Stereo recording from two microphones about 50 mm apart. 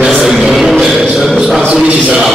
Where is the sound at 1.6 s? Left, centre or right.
Centre.